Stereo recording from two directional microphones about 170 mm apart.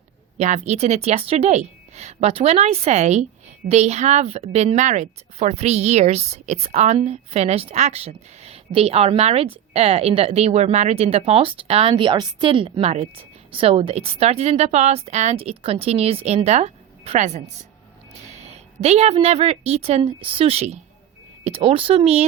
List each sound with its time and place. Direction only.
0.3 s a woman's voice: 40° right (ahead or behind)